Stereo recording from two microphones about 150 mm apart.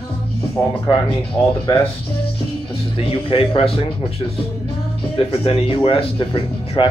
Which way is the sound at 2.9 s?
40° left (ahead or behind).